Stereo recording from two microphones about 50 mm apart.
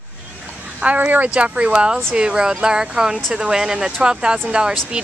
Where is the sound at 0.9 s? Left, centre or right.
Right.